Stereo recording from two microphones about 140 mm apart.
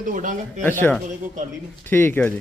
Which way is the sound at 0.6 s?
15° left (ahead or behind).